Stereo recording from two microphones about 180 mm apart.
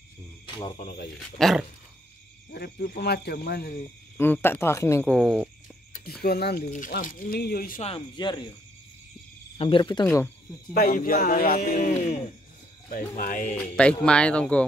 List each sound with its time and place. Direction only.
0.7 s speech: 60° left (ahead or behind)
1.4 s speech: centre (ahead or behind)
2.5 s speech: 55° left (ahead or behind)
4.2 s speech: 10° left (ahead or behind)
5.1 s speech: centre (ahead or behind)
6.2 s speech: 60° left (ahead or behind)
6.6 s a man's voice: 45° left (ahead or behind)
7.8 s speech: 30° left (ahead or behind)
9.6 s speech: 30° left (ahead or behind)
10.0 s speech: 10° left (ahead or behind)
10.7 s a man's voice: 55° left (ahead or behind)
13.6 s speech: 5° left (ahead or behind)